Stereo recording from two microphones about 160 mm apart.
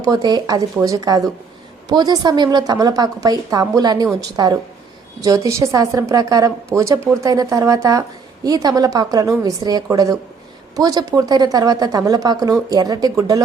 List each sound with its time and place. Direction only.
0.0 s a woman's voice: 25° right (ahead or behind)